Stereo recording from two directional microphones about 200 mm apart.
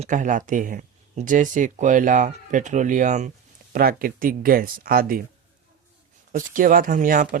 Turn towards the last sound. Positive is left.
turn(degrees=-40)  # may be behind; listen again after turning